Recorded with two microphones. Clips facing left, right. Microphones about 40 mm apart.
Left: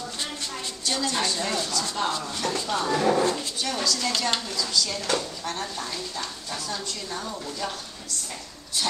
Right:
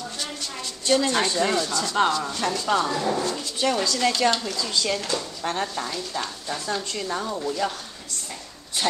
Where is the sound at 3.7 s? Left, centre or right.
Right.